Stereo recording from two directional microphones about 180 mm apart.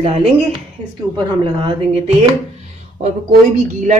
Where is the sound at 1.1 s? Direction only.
25° right (ahead or behind).